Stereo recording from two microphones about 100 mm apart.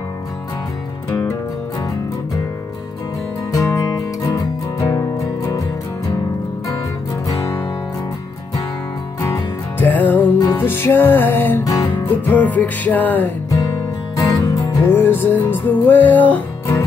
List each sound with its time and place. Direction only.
3.5 s music: 35° left (ahead or behind)
7.2 s music: 30° left (ahead or behind)
9.2 s music: 20° left (ahead or behind)
11.6 s music: 35° left (ahead or behind)
12.0 s music: 15° left (ahead or behind)
14.1 s music: 35° left (ahead or behind)
14.9 s music: 20° left (ahead or behind)